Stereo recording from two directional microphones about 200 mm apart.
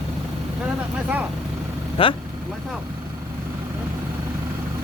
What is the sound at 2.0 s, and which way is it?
Speech, 25° left (ahead or behind).